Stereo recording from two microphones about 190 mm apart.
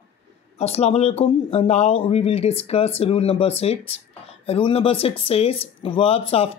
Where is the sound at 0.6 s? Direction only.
35° left (ahead or behind).